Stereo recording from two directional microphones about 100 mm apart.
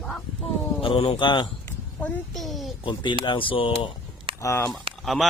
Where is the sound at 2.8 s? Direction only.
50° left (ahead or behind).